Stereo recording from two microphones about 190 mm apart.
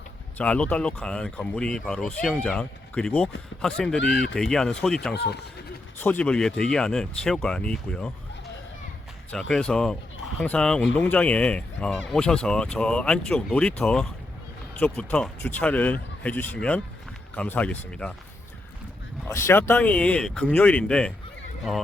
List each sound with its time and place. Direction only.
0.3 s speech: 5° left (ahead or behind)
5.1 s speech: 60° left (ahead or behind)
6.0 s speech: 10° left (ahead or behind)
9.3 s speech: 5° left (ahead or behind)
19.3 s speech: 15° left (ahead or behind)